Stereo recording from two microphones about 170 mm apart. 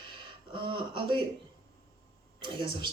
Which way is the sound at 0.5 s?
30° right (ahead or behind).